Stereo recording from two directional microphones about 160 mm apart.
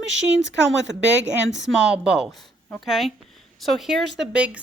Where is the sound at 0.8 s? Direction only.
90° right.